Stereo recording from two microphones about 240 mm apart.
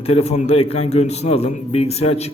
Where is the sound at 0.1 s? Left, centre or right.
Left.